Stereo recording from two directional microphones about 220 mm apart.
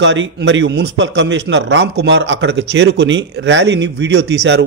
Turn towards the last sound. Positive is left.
turn(degrees=-50)  # may be behind; listen again after turning